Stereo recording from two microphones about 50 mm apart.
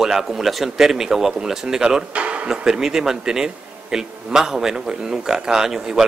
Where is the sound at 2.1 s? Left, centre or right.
Right.